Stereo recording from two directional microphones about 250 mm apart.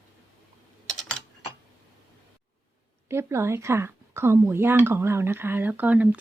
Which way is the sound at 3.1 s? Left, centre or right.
Centre.